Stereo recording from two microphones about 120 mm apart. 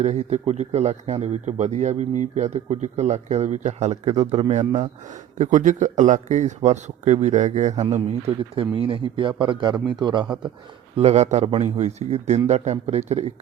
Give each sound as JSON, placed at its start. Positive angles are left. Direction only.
{"t": 0.0, "sound": "speech", "side_deg": -65}
{"t": 5.4, "sound": "speech", "side_deg": -90}
{"t": 8.5, "sound": "a man's voice", "side_deg": -45}
{"t": 10.9, "sound": "speech", "side_deg": -65}